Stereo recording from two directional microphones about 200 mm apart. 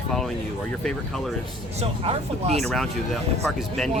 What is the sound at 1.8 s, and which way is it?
Speech, 30° right (ahead or behind).